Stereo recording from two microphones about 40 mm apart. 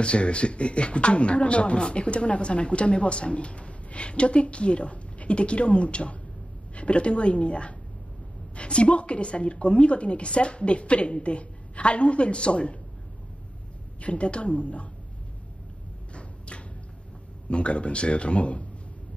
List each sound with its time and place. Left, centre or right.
0.0 s speech: left
14.0 s a woman's voice: left
16.1 s a sound: left
17.5 s speech: left